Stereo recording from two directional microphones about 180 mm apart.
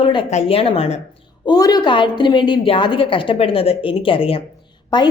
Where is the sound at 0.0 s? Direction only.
30° left (ahead or behind).